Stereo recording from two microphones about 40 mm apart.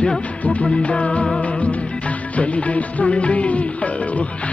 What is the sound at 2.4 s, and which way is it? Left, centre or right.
Music, left.